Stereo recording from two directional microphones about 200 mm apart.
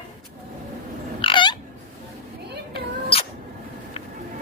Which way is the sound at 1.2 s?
25° left (ahead or behind).